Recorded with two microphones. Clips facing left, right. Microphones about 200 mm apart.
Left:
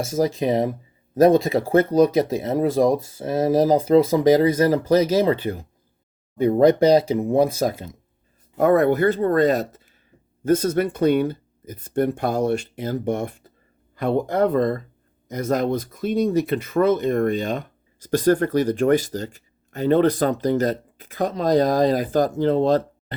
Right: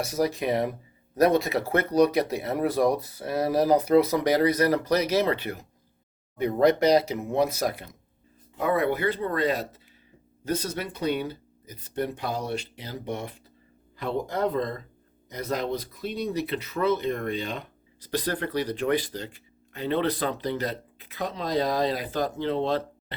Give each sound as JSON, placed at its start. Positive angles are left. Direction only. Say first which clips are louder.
{"t": 0.2, "sound": "speech", "louder": "left 5 dB", "side_deg": 20}
{"t": 8.5, "sound": "speech", "louder": "left 8 dB", "side_deg": 45}